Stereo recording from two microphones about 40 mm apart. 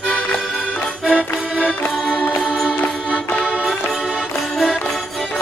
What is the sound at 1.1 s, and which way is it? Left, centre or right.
Music, right.